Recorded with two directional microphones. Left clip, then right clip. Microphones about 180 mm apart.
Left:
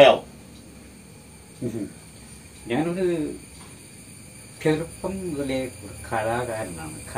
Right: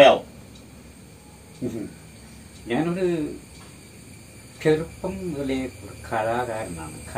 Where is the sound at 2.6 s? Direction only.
10° right (ahead or behind).